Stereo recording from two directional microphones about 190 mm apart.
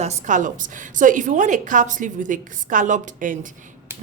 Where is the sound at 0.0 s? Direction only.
40° right (ahead or behind).